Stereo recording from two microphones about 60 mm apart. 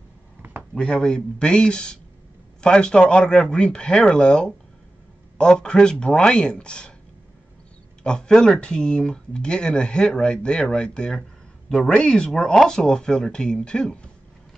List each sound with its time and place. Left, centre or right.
0.7 s speech: centre
8.0 s speech: centre